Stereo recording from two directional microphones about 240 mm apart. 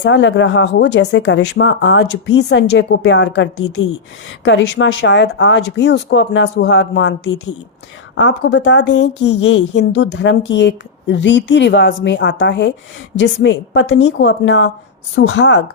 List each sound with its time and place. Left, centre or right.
0.0 s a woman's voice: left